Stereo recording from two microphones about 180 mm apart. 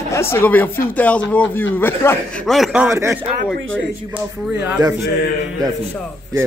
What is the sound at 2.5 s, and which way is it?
Speech, centre (ahead or behind).